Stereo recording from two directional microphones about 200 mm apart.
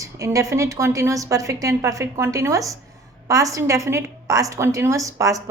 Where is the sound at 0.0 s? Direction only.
15° right (ahead or behind).